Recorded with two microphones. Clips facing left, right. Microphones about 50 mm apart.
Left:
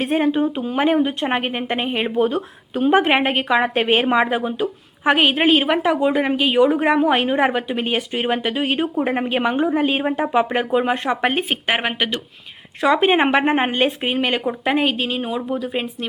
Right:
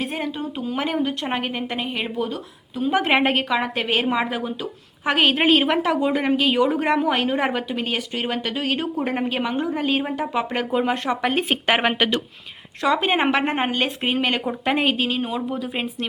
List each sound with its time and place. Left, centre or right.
0.0 s speech: left
2.9 s a woman's voice: centre
3.5 s a woman's voice: left
7.7 s a woman's voice: left
14.0 s speech: centre